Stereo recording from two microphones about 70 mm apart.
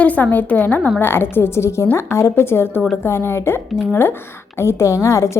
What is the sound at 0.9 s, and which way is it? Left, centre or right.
A woman's voice, left.